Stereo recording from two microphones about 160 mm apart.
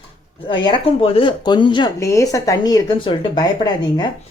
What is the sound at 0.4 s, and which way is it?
Speech, 30° left (ahead or behind).